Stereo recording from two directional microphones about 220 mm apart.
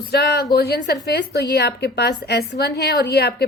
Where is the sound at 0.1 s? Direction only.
45° left (ahead or behind).